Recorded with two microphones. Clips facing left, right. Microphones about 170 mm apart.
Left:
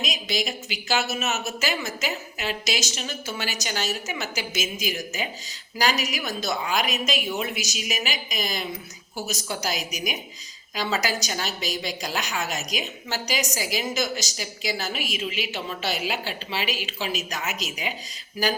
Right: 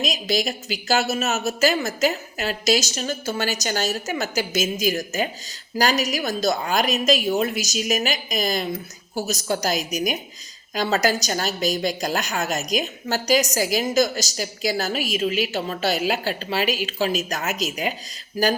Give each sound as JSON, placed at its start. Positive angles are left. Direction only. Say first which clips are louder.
{"t": 0.0, "sound": "a woman's voice", "louder": "right 5 dB", "side_deg": -40}